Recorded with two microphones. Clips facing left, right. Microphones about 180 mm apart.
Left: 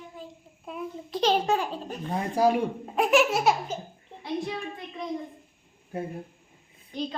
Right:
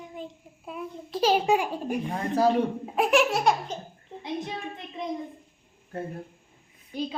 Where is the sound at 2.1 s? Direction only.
10° left (ahead or behind).